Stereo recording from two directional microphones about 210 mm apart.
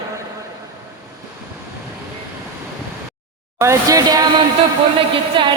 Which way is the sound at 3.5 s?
15° right (ahead or behind).